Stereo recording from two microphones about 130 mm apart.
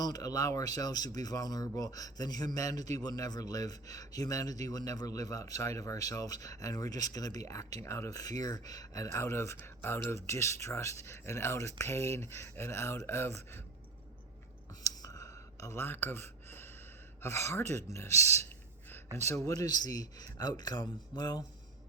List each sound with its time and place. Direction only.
0.0 s speech: 30° left (ahead or behind)
14.8 s a sound: 25° left (ahead or behind)
17.2 s speech: 20° left (ahead or behind)